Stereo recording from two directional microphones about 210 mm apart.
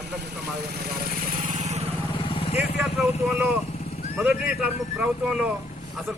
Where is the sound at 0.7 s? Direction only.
45° right (ahead or behind).